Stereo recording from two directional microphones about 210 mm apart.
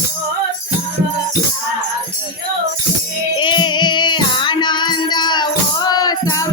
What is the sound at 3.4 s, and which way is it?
Child singing, 20° left (ahead or behind).